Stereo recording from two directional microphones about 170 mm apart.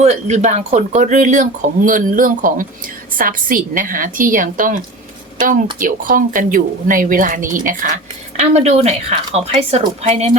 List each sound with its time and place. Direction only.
0.0 s speech: 40° right (ahead or behind)
5.8 s speech: 55° right (ahead or behind)
8.4 s speech: 40° right (ahead or behind)